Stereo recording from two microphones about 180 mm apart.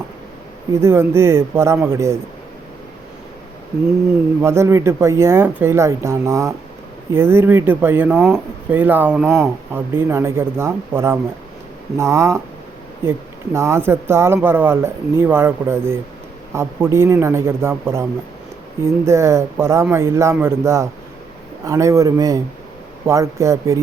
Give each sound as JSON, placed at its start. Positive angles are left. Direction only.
{"t": 0.7, "sound": "speech", "side_deg": -15}
{"t": 4.4, "sound": "speech", "side_deg": -15}